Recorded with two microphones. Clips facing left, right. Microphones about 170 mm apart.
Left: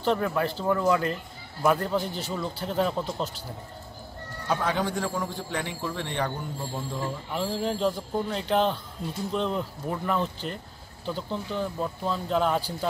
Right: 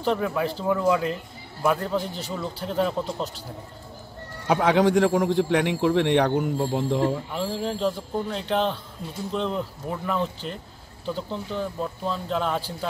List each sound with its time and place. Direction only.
0.0 s a man's voice: 5° right (ahead or behind)
4.5 s a man's voice: 85° right
7.3 s a man's voice: centre (ahead or behind)